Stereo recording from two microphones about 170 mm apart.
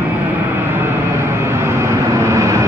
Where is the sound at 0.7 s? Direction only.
15° right (ahead or behind).